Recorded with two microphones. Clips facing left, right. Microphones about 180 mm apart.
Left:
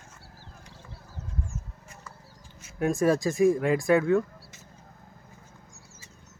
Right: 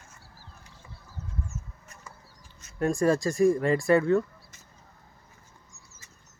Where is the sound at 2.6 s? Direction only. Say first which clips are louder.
Even; 5° left (ahead or behind).